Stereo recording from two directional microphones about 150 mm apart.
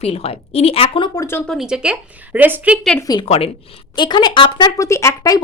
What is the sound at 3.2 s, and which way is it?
Speech, 40° left (ahead or behind).